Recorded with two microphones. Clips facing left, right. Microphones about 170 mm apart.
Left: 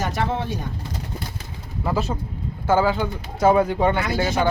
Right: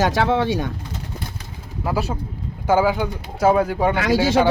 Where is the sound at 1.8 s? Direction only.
10° right (ahead or behind).